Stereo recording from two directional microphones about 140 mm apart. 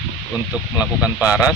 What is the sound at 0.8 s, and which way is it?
Speech, 5° right (ahead or behind).